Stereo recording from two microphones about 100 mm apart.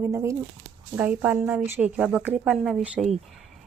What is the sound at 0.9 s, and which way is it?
A woman's voice, 15° right (ahead or behind).